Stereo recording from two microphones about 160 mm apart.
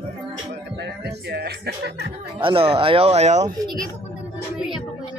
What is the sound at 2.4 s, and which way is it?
Speech, 35° right (ahead or behind).